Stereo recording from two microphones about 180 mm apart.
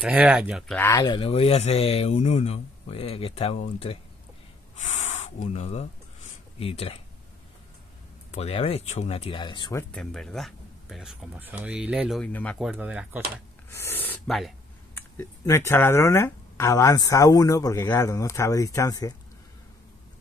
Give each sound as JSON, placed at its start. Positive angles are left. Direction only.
{"t": 0.0, "sound": "speech", "side_deg": -5}
{"t": 0.7, "sound": "speech", "side_deg": 20}
{"t": 4.7, "sound": "a sound", "side_deg": 40}
{"t": 6.6, "sound": "speech", "side_deg": 35}
{"t": 8.3, "sound": "speech", "side_deg": 35}
{"t": 9.8, "sound": "speech", "side_deg": 5}
{"t": 12.3, "sound": "speech", "side_deg": 10}
{"t": 12.5, "sound": "speech", "side_deg": -5}
{"t": 13.7, "sound": "a sound", "side_deg": 15}
{"t": 15.0, "sound": "speech", "side_deg": 15}